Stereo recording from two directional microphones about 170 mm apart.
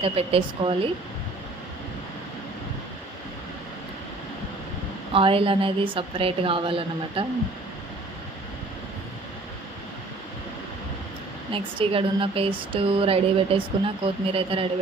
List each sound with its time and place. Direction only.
0.0 s a woman's voice: 35° right (ahead or behind)
5.1 s a woman's voice: 35° right (ahead or behind)
11.5 s a woman's voice: 30° right (ahead or behind)